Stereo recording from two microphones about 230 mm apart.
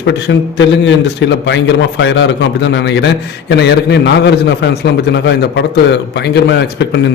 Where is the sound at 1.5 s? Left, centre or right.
Left.